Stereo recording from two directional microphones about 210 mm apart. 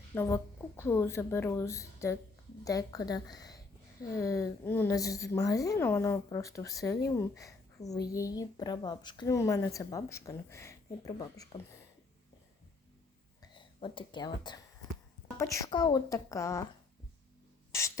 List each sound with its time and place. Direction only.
0.1 s a woman's voice: 10° left (ahead or behind)
13.4 s a woman's voice: 25° left (ahead or behind)
17.7 s a sound: 15° left (ahead or behind)